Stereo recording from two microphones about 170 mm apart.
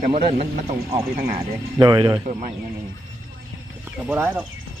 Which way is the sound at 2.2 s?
40° right (ahead or behind).